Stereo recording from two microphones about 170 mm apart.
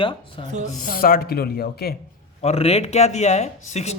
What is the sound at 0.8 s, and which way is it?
Speech, 60° left (ahead or behind).